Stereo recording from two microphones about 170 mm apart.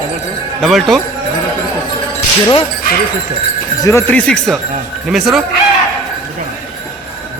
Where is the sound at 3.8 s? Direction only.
15° left (ahead or behind).